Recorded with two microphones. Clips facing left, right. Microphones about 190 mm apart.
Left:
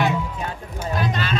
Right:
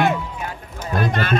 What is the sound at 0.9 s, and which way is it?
Run, 55° right (ahead or behind).